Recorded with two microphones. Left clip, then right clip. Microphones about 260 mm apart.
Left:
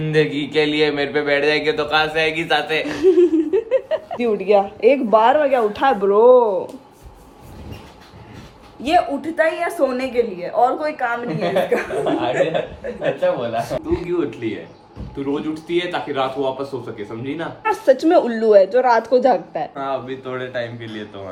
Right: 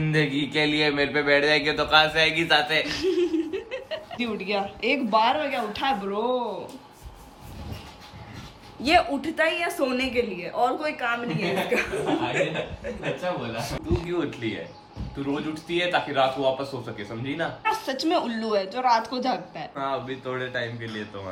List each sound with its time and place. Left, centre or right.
0.0 s a man's voice: centre
6.2 s speech: right
9.2 s a man's voice: centre